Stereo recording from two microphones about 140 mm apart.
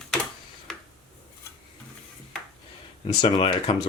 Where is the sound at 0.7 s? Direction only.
Centre (ahead or behind).